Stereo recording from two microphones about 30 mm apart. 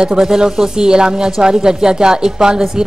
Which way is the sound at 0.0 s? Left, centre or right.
Right.